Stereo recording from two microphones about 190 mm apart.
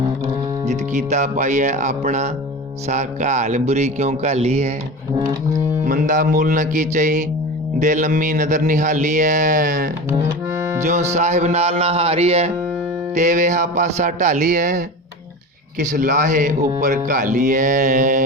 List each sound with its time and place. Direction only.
0.6 s speech: 40° right (ahead or behind)
5.8 s speech: 45° right (ahead or behind)
10.5 s music: 15° right (ahead or behind)
11.1 s speech: 35° right (ahead or behind)